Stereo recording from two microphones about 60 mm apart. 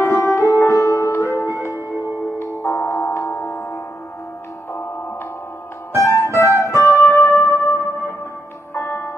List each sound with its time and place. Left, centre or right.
0.0 s music: left
5.9 s music: left